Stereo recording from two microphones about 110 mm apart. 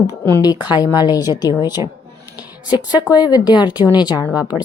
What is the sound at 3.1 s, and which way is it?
Speech, 40° left (ahead or behind).